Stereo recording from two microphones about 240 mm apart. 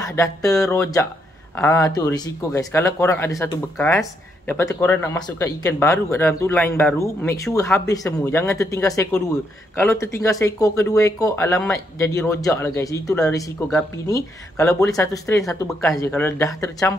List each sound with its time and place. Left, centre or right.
0.1 s speech: centre